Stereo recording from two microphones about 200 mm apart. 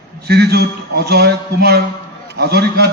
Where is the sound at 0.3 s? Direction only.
55° right (ahead or behind).